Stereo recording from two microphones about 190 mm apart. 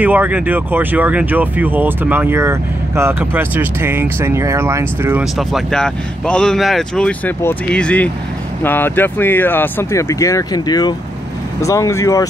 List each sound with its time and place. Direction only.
0.0 s speech: 10° right (ahead or behind)
5.2 s speech: centre (ahead or behind)